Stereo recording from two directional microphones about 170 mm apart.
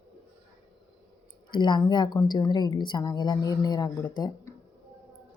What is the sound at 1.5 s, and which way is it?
A woman's voice, 25° left (ahead or behind).